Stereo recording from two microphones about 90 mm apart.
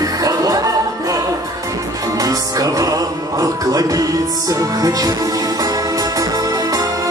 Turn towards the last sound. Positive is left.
turn(degrees=-45)  # may be behind; listen again after turning